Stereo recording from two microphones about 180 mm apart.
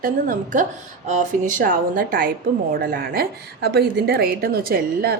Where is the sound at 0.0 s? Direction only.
45° right (ahead or behind).